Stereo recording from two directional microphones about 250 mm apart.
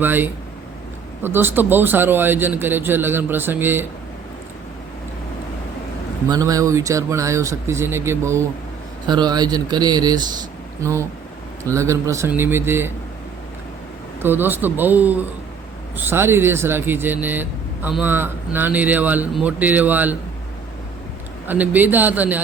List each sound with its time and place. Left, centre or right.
0.0 s speech: centre
6.2 s speech: centre
14.2 s speech: centre
21.4 s speech: centre